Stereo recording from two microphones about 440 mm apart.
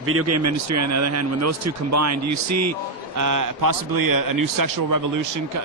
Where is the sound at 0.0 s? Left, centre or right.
Right.